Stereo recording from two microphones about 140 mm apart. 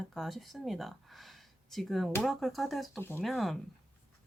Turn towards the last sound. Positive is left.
turn(degrees=0)  # may be behind; listen again after turning